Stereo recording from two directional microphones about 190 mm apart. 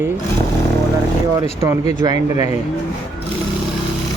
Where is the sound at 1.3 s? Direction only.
15° right (ahead or behind).